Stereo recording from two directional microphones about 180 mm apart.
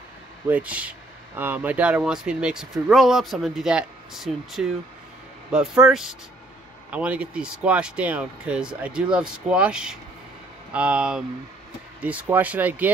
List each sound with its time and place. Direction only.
0.5 s speech: 5° right (ahead or behind)